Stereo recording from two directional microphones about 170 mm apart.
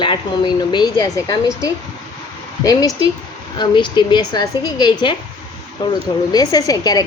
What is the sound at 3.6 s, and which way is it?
A woman's voice, 25° left (ahead or behind).